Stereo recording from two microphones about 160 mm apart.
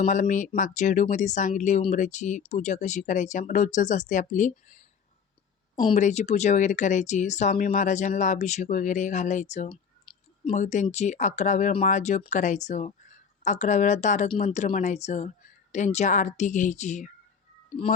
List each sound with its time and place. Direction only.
0.0 s speech: 50° left (ahead or behind)
6.0 s speech: 45° left (ahead or behind)